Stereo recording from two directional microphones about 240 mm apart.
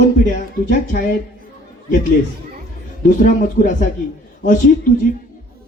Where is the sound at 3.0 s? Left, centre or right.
Left.